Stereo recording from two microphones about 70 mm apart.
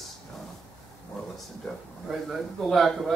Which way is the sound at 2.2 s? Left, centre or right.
Centre.